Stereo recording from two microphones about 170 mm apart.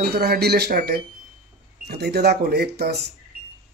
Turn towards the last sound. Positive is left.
turn(degrees=-75)  # may be behind; listen again after turning